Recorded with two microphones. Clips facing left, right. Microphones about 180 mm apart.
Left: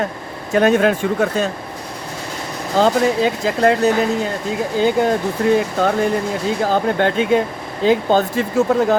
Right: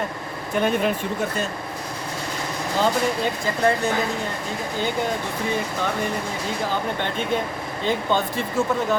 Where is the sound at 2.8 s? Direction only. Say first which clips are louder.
Left 7 dB; 85° left.